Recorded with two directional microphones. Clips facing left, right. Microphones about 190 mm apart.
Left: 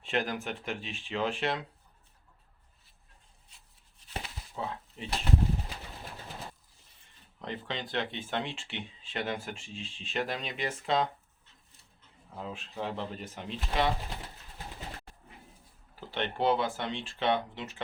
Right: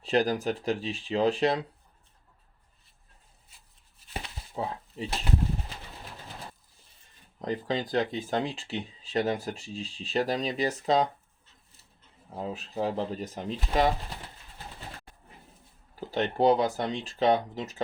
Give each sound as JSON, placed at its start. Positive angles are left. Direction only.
{"t": 0.0, "sound": "speech", "side_deg": -35}
{"t": 3.5, "sound": "a sound", "side_deg": -5}
{"t": 4.0, "sound": "chopping", "side_deg": -5}
{"t": 4.5, "sound": "a sound", "side_deg": -35}
{"t": 7.3, "sound": "speech", "side_deg": -35}
{"t": 12.3, "sound": "speech", "side_deg": -40}
{"t": 16.0, "sound": "speech", "side_deg": -40}